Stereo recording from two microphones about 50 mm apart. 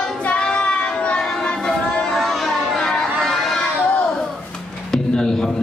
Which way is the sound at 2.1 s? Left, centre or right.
Centre.